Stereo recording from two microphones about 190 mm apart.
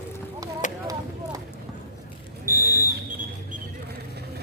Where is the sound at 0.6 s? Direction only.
40° left (ahead or behind).